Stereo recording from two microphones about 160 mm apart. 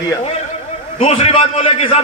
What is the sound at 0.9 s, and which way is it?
A man's voice, 40° left (ahead or behind).